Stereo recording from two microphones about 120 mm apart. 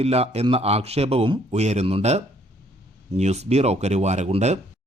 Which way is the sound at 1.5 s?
65° right (ahead or behind).